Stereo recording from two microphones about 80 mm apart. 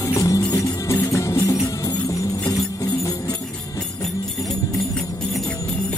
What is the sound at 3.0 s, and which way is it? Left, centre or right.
Music, left.